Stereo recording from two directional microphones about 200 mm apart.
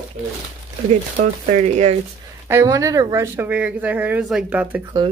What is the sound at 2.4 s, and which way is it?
Speech, 15° right (ahead or behind).